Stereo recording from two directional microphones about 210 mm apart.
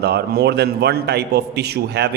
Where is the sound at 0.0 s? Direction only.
50° right (ahead or behind).